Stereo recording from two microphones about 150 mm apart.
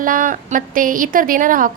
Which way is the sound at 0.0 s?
65° right (ahead or behind).